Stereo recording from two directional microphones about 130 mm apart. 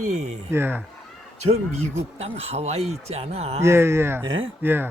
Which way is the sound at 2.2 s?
50° right (ahead or behind).